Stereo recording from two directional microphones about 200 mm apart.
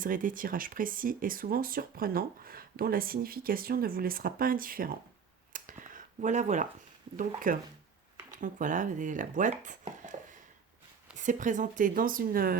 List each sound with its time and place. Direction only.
0.0 s speech: 40° right (ahead or behind)
5.5 s a sound: 40° right (ahead or behind)
7.2 s speech: 45° right (ahead or behind)
11.1 s speech: 40° right (ahead or behind)